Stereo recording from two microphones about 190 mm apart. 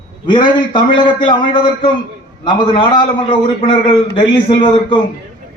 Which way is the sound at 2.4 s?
25° left (ahead or behind).